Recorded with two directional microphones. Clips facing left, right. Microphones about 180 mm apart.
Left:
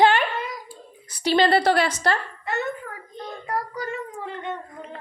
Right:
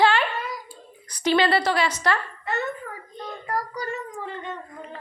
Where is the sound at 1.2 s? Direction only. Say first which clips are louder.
Left 2 dB; 40° left (ahead or behind); by 1.9 s 55° left (ahead or behind).